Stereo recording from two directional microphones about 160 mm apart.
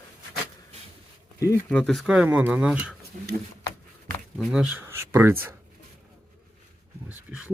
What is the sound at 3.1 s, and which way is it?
Speech, 55° right (ahead or behind).